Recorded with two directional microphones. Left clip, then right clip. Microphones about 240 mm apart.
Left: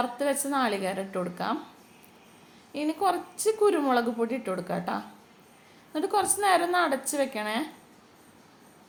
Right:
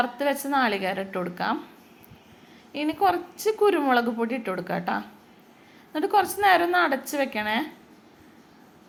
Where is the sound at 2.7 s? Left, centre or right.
Centre.